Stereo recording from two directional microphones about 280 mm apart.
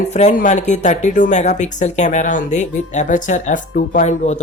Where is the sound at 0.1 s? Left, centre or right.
Left.